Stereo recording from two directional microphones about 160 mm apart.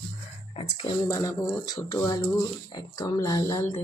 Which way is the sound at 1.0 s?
20° left (ahead or behind).